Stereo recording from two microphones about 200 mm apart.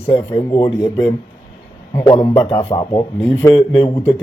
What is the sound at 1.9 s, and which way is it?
Speech, 15° left (ahead or behind).